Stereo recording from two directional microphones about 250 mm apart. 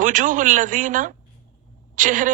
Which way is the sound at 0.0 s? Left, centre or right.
Right.